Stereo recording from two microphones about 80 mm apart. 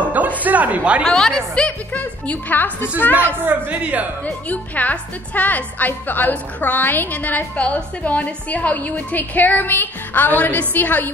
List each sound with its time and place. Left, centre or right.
0.1 s a sound: centre
1.0 s a woman's voice: centre; by 3.3 s left
3.4 s speech: centre
4.5 s a woman's voice: centre